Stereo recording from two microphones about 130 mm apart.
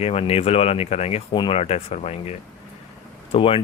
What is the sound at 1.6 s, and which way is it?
Speech, 50° left (ahead or behind).